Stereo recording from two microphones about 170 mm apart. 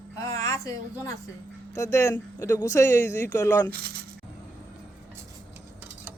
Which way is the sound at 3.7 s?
65° right (ahead or behind).